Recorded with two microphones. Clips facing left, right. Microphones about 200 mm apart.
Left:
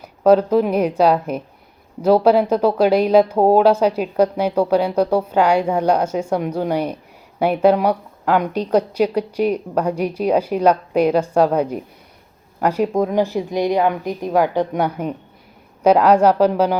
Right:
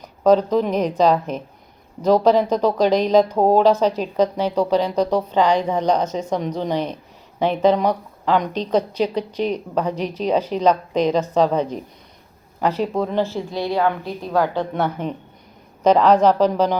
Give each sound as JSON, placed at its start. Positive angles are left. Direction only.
{"t": 0.0, "sound": "speech", "side_deg": 10}